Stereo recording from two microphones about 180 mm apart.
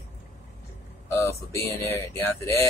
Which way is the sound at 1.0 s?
15° left (ahead or behind).